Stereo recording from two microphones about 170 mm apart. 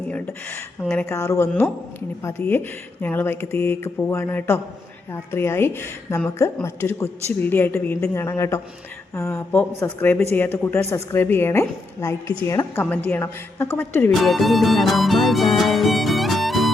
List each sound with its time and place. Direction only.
0.1 s speech: 10° left (ahead or behind)
14.2 s music: centre (ahead or behind)